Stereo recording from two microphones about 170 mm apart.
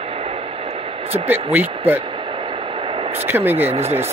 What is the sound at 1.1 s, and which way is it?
Speech, 10° right (ahead or behind).